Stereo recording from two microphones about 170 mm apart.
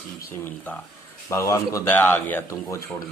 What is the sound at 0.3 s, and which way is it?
Speech, 10° left (ahead or behind).